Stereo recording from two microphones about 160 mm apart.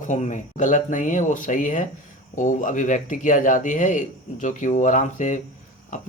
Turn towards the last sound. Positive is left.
turn(degrees=50)  # may be behind; listen again after turning